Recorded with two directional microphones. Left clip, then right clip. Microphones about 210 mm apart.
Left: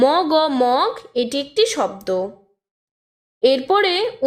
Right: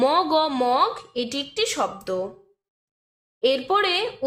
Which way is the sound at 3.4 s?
35° left (ahead or behind).